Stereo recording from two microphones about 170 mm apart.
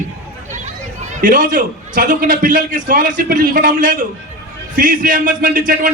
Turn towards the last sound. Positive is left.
turn(degrees=-55)  # may be behind; listen again after turning